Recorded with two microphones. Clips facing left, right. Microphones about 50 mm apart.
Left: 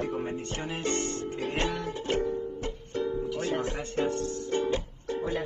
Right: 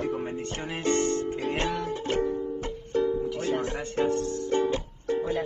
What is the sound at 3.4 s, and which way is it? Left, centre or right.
Music, left.